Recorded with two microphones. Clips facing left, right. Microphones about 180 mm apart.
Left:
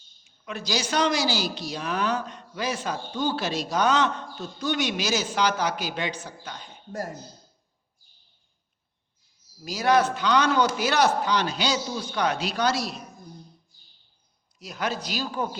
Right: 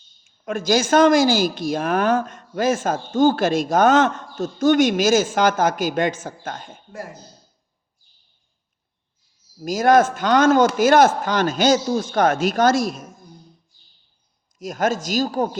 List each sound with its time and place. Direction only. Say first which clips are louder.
0.4 s speech: right 10 dB; 50° right (ahead or behind)
9.6 s speech: right 6 dB; 50° right (ahead or behind)
14.6 s speech: right 8 dB; 45° right (ahead or behind)